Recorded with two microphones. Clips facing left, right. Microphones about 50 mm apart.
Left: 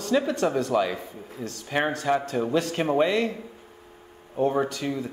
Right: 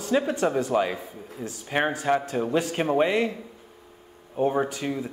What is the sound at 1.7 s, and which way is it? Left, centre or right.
Speech, right.